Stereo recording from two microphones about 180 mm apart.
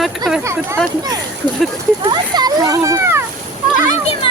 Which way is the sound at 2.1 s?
25° right (ahead or behind).